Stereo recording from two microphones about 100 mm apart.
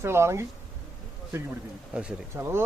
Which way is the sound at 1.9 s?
10° right (ahead or behind).